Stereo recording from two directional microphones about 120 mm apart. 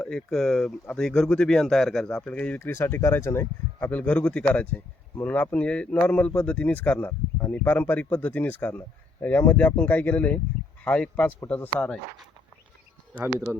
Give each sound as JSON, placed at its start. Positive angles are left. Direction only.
{"t": 0.1, "sound": "speech", "side_deg": 5}